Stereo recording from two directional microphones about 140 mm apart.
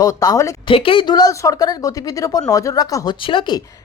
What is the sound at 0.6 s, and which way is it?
Speech, 40° left (ahead or behind).